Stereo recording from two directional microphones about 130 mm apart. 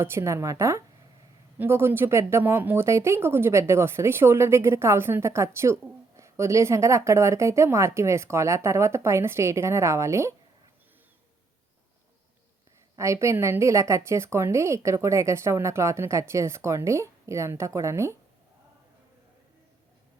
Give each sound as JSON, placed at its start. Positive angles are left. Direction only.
{"t": 0.0, "sound": "speech", "side_deg": -20}
{"t": 13.0, "sound": "speech", "side_deg": -20}